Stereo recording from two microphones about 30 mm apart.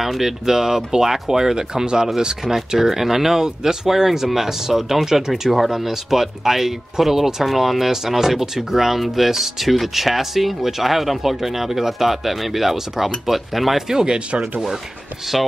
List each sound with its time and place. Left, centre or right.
0.2 s speech: centre
2.7 s speech: centre
13.8 s speech: right
15.3 s speech: centre